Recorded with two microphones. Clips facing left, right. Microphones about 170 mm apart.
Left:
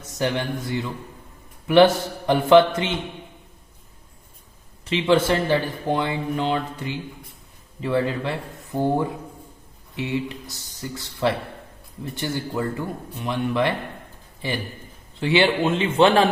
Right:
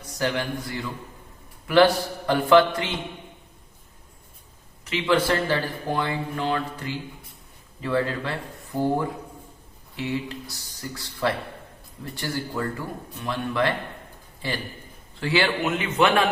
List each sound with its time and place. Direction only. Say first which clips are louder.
0.2 s speech: left 2 dB; 20° left (ahead or behind)
4.9 s speech: left 3 dB; 25° left (ahead or behind)
15.2 s speech: left 4 dB; 25° left (ahead or behind)